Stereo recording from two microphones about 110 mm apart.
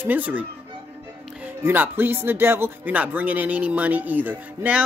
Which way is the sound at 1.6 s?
20° right (ahead or behind).